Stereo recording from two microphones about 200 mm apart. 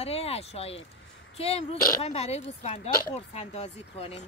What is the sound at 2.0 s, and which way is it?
Speech, 30° left (ahead or behind).